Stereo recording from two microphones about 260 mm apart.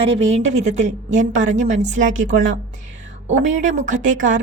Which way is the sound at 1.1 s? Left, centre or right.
Right.